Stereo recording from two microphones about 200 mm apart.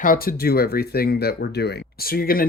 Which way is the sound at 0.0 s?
45° left (ahead or behind).